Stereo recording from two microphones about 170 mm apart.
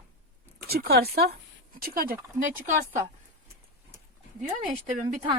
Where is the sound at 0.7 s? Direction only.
65° right (ahead or behind).